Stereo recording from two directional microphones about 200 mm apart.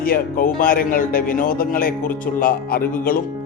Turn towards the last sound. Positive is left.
turn(degrees=45)  # may be behind; listen again after turning